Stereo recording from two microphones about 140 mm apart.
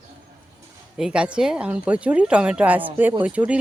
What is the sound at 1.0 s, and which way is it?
A woman's voice, 5° right (ahead or behind).